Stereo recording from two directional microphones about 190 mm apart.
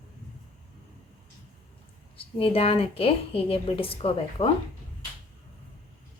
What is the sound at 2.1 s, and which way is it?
A woman's voice, 30° left (ahead or behind).